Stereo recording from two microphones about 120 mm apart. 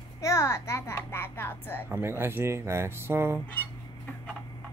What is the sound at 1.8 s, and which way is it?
Speech, 20° right (ahead or behind).